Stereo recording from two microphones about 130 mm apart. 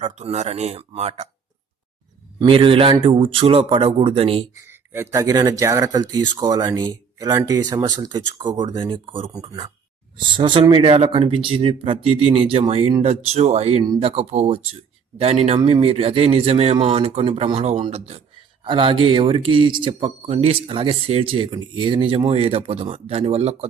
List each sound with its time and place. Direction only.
0.0 s speech: 60° right (ahead or behind)
2.4 s speech: 40° right (ahead or behind)
4.5 s speech: 20° right (ahead or behind); by 18.2 s 55° right (ahead or behind)
18.6 s speech: 40° right (ahead or behind)